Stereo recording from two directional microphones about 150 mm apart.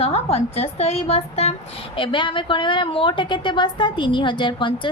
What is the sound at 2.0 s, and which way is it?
A woman's voice, 35° left (ahead or behind).